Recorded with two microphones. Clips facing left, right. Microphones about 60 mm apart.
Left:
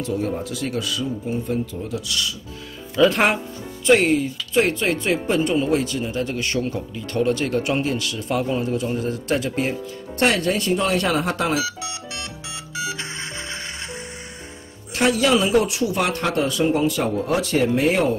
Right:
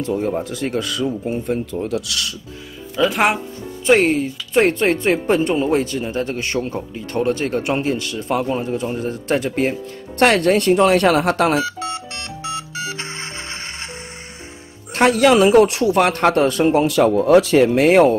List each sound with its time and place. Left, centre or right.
0.0 s speech: right
2.0 s speech: right
3.0 s speech: centre
3.8 s speech: right
10.1 s speech: right
14.9 s speech: right
16.7 s speech: right